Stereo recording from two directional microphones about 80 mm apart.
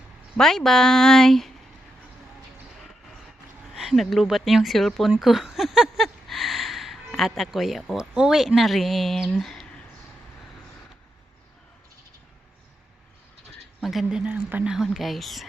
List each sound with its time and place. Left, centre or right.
0.3 s speech: centre
3.8 s speech: centre
5.2 s a sound: centre
7.2 s speech: centre
13.8 s speech: centre
14.3 s speech: right
14.6 s speech: centre